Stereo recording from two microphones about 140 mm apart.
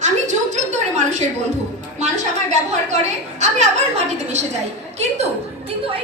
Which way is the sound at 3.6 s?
55° right (ahead or behind).